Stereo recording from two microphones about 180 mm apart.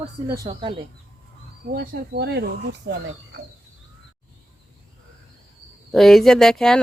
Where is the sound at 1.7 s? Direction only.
60° right (ahead or behind).